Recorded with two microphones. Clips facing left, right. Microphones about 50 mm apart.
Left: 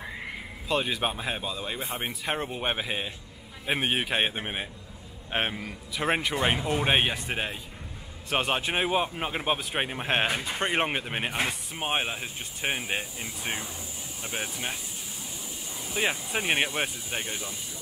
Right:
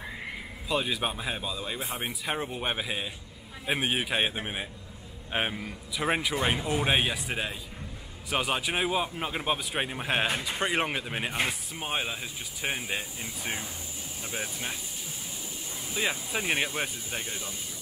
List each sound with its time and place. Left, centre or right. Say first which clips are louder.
0.7 s speech: left 2 dB; centre
1.0 s a man's voice: left 2 dB; centre
6.3 s speech: left 2 dB; centre
6.6 s speech: left 1 dB; centre
6.9 s speech: left 3 dB; centre
8.8 s a man's voice: left 2 dB; centre; by 12.1 s left
12.1 s speech: left 2 dB; centre
15.9 s speech: left 2 dB; left